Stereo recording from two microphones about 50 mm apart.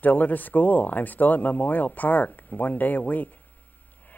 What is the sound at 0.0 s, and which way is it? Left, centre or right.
Speech, left.